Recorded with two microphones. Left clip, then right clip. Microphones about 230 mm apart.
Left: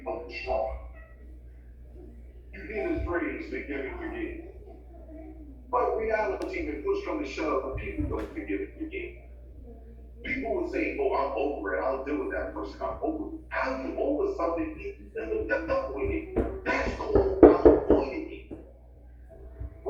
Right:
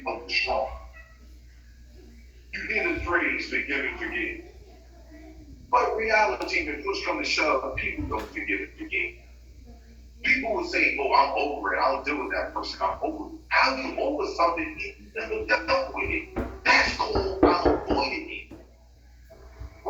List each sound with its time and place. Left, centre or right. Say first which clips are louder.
0.0 s a sound: right 7 dB; right
2.5 s a man's voice: right 5 dB; right
5.7 s a man's voice: right 4 dB; right
10.2 s a man's voice: right 6 dB; right
16.6 s music: right 13 dB; right